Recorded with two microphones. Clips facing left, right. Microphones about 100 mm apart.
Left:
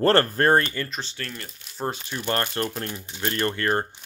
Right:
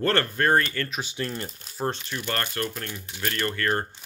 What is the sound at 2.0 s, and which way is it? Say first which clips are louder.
Speech: left 3 dB; 25° left (ahead or behind).